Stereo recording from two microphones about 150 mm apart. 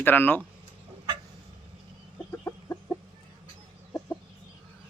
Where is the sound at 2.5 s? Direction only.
20° left (ahead or behind).